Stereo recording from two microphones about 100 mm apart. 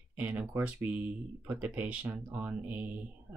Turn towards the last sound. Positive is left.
turn(degrees=-15)  # may be behind; listen again after turning